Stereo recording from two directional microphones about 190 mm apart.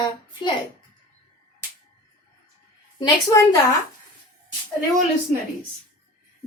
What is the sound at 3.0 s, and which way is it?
Speech, 20° left (ahead or behind).